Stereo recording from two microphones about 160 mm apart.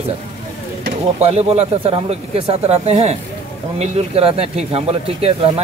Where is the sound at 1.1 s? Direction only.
40° right (ahead or behind).